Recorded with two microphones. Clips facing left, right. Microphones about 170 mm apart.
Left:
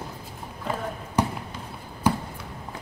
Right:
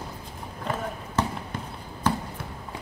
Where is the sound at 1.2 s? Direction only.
15° left (ahead or behind).